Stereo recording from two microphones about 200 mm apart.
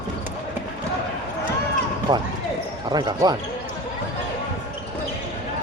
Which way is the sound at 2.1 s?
20° right (ahead or behind).